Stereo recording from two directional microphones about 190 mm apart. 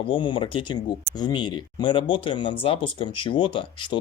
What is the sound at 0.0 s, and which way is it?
Speech, 25° left (ahead or behind).